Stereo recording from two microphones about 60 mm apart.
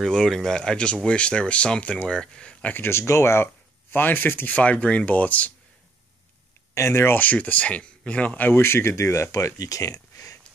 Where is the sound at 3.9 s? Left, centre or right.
Left.